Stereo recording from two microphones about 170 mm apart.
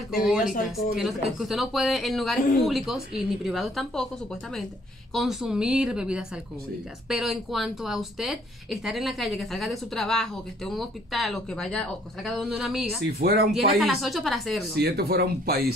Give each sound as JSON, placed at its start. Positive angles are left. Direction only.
{"t": 0.1, "sound": "speech", "side_deg": 0}
{"t": 13.0, "sound": "speech", "side_deg": -70}
{"t": 13.5, "sound": "speech", "side_deg": 0}
{"t": 14.8, "sound": "speech", "side_deg": -75}